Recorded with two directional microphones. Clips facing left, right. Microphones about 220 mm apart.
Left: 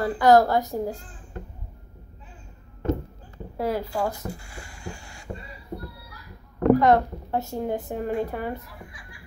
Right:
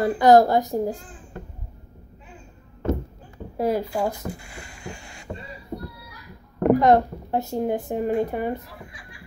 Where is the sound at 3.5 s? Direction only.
15° right (ahead or behind).